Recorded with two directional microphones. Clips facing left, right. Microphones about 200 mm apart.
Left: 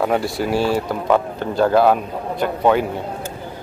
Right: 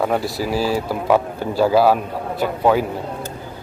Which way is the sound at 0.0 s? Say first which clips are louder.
Left 1 dB; centre (ahead or behind).